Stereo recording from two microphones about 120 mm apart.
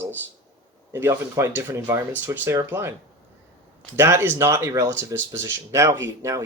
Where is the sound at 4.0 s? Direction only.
20° right (ahead or behind).